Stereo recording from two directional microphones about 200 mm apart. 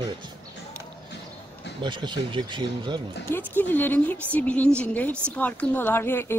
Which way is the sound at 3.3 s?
10° left (ahead or behind).